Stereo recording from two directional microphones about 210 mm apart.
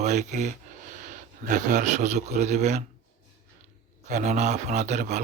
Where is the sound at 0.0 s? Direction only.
35° right (ahead or behind).